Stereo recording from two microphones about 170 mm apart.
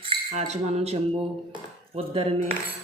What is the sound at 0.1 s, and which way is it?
Cutlery, 40° right (ahead or behind).